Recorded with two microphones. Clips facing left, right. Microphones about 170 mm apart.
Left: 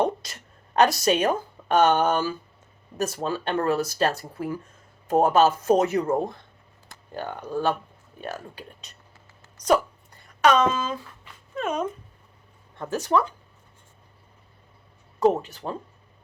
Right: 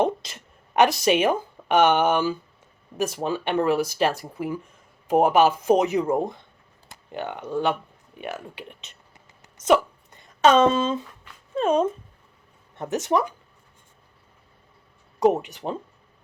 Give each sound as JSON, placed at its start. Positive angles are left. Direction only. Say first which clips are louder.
{"t": 0.0, "sound": "a woman's voice", "louder": "right 1 dB", "side_deg": -20}
{"t": 9.6, "sound": "a sound", "louder": "right 2 dB", "side_deg": -25}
{"t": 11.5, "sound": "speech", "louder": "right 6 dB", "side_deg": -30}
{"t": 15.2, "sound": "speech", "louder": "right 1 dB", "side_deg": -20}